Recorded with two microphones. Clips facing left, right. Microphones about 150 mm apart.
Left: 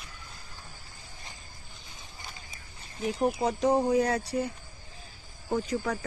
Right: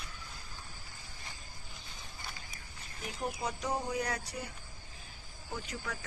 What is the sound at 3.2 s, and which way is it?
Speech, 30° left (ahead or behind).